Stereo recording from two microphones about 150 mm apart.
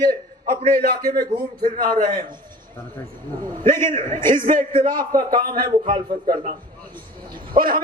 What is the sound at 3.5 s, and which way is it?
A man's voice, 65° right (ahead or behind).